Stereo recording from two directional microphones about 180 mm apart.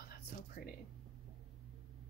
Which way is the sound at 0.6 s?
55° left (ahead or behind).